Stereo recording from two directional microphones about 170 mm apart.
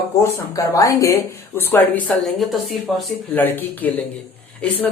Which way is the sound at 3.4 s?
10° left (ahead or behind).